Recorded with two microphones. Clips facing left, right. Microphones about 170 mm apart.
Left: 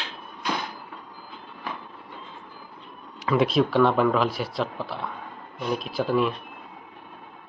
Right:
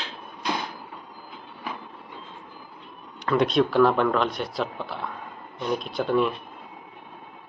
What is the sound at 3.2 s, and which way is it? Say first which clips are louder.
Speech: even; 5° left (ahead or behind).